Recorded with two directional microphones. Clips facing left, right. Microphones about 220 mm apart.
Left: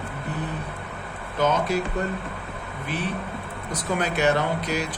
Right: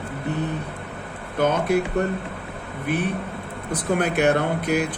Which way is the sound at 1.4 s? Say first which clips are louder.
Right 3 dB; 60° right (ahead or behind).